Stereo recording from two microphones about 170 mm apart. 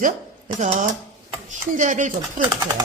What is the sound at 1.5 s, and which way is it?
Speech, 45° right (ahead or behind).